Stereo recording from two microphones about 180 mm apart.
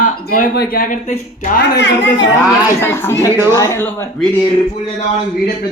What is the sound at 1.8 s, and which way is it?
Speech, 90° left.